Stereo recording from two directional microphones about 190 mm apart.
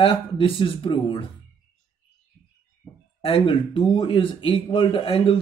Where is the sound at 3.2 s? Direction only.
30° left (ahead or behind).